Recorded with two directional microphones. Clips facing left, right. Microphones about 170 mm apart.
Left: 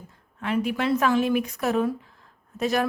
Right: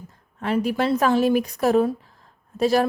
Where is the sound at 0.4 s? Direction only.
35° right (ahead or behind).